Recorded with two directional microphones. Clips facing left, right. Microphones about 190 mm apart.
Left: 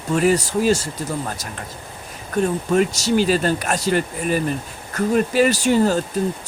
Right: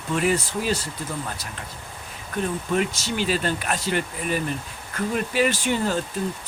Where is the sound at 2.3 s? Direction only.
40° left (ahead or behind).